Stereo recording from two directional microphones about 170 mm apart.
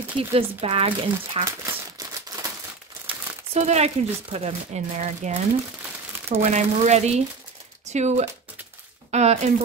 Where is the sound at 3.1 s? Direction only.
40° right (ahead or behind).